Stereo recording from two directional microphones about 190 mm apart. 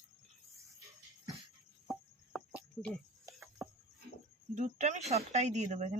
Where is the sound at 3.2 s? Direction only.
15° right (ahead or behind).